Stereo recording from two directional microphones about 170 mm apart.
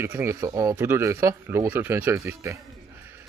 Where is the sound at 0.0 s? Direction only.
15° right (ahead or behind).